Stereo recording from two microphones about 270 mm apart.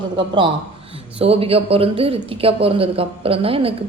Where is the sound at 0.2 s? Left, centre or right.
Centre.